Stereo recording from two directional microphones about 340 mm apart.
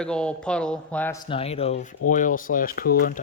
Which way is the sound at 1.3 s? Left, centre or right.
Centre.